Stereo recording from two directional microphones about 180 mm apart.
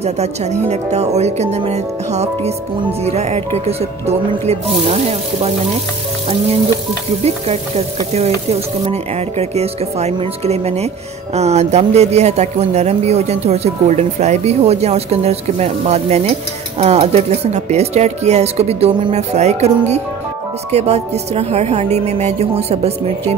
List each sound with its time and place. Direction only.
0.0 s speech: 40° right (ahead or behind)
7.2 s speech: 35° right (ahead or behind)
20.7 s speech: 35° right (ahead or behind)